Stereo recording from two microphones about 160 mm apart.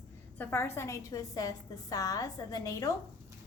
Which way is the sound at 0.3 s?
15° left (ahead or behind).